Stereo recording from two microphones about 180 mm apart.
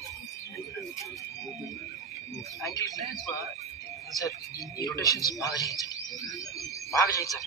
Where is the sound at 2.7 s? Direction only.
20° left (ahead or behind).